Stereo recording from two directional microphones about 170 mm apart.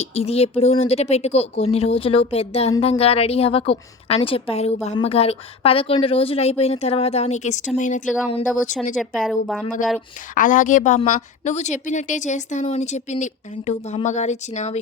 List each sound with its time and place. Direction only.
0.0 s a woman's voice: 35° left (ahead or behind)
9.0 s speech: centre (ahead or behind)
10.3 s a woman's voice: 50° left (ahead or behind)